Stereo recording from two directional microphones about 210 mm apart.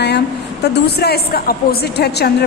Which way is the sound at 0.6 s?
50° left (ahead or behind).